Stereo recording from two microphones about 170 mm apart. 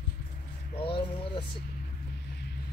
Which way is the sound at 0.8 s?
30° left (ahead or behind).